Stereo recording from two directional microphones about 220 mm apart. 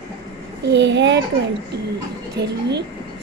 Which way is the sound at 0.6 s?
55° right (ahead or behind).